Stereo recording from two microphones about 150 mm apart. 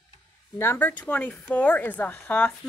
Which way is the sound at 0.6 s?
15° left (ahead or behind).